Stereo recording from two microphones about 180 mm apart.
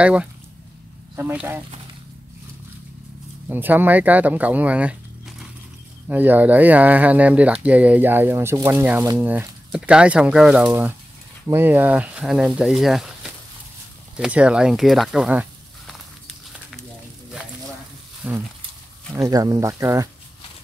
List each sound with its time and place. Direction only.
0.0 s speech: 5° right (ahead or behind)
3.4 s speech: 10° right (ahead or behind)
15.9 s a sound: centre (ahead or behind)
18.2 s speech: 10° right (ahead or behind)
19.1 s speech: 20° right (ahead or behind)